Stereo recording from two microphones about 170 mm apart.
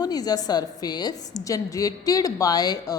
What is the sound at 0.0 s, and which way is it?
A woman's voice, 25° left (ahead or behind).